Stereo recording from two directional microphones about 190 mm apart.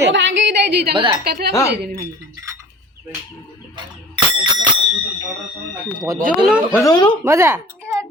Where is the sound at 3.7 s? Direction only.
25° right (ahead or behind).